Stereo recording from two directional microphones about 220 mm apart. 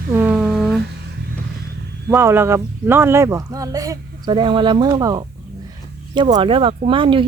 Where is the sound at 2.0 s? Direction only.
10° right (ahead or behind).